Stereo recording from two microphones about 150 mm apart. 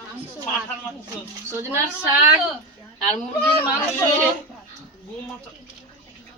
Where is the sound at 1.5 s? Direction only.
15° right (ahead or behind).